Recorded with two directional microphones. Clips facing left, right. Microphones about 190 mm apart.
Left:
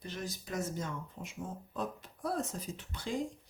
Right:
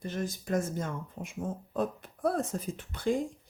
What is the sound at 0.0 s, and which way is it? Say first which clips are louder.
Speech: right 6 dB; 50° right (ahead or behind).